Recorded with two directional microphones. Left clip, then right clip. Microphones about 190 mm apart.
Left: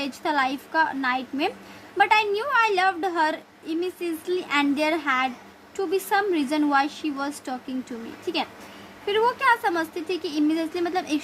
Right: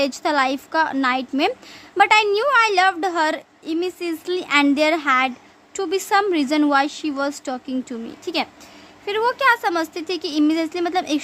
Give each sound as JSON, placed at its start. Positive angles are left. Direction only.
{"t": 0.0, "sound": "a woman's voice", "side_deg": -35}